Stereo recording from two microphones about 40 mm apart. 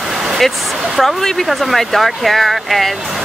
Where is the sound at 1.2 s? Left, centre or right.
Centre.